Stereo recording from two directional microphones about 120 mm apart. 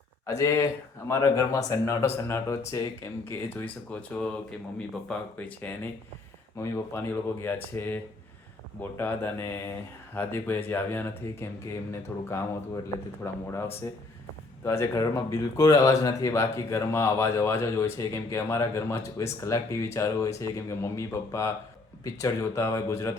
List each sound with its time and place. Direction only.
0.3 s speech: 25° left (ahead or behind)
6.6 s speech: 25° left (ahead or behind)